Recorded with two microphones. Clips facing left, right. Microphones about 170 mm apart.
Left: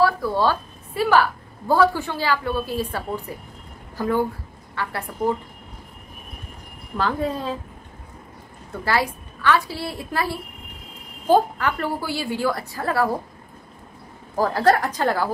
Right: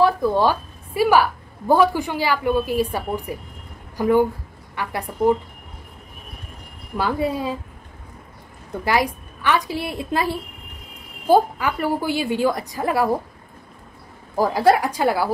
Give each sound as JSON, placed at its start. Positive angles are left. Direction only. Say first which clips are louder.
{"t": 0.0, "sound": "a woman's voice", "louder": "right 2 dB", "side_deg": -20}
{"t": 7.0, "sound": "a woman's voice", "louder": "right 2 dB", "side_deg": -10}
{"t": 8.8, "sound": "a woman's voice", "louder": "right 2 dB", "side_deg": -15}
{"t": 14.3, "sound": "a woman's voice", "louder": "right 2 dB", "side_deg": -10}